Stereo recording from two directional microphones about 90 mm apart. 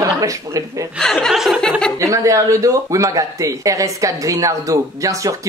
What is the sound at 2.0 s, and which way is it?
Speech, 40° right (ahead or behind).